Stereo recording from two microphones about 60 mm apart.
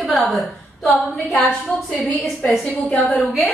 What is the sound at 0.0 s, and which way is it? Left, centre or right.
A woman's voice, centre.